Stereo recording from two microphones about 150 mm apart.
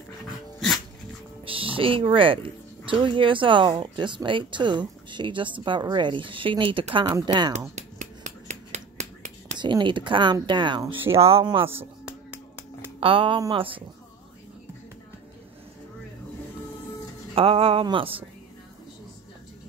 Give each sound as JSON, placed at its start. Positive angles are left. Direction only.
{"t": 1.4, "sound": "speech", "side_deg": -35}
{"t": 7.7, "sound": "finger snapping", "side_deg": -50}
{"t": 9.6, "sound": "speech", "side_deg": -30}
{"t": 11.6, "sound": "music", "side_deg": -15}
{"t": 13.0, "sound": "speech", "side_deg": -35}
{"t": 17.4, "sound": "speech", "side_deg": -40}